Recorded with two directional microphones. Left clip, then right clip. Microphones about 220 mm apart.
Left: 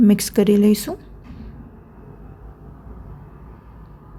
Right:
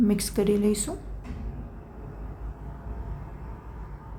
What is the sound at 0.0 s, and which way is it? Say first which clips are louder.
Speech: left 8 dB; 35° left (ahead or behind).